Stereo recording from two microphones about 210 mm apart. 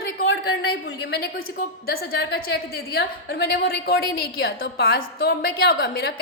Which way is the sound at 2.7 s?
50° left (ahead or behind).